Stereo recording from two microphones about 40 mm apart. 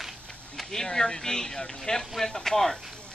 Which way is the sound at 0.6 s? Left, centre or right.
Centre.